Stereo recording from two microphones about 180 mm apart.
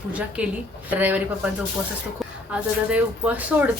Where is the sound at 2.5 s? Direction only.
10° right (ahead or behind).